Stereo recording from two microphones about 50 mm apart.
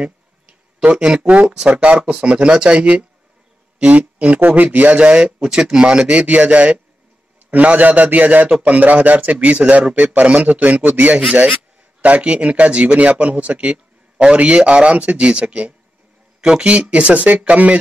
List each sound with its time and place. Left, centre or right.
1.2 s a man's voice: right
4.5 s a man's voice: right